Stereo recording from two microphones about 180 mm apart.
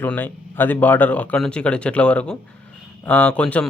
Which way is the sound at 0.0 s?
10° left (ahead or behind).